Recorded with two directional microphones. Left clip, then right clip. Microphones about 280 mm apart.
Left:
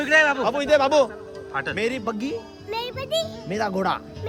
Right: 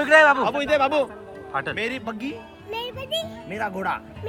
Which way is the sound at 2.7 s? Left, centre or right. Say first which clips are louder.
Left 2 dB; centre.